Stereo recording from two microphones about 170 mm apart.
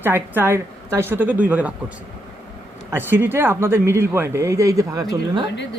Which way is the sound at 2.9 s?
10° right (ahead or behind).